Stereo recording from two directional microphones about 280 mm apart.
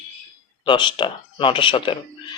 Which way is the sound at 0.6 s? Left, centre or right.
Centre.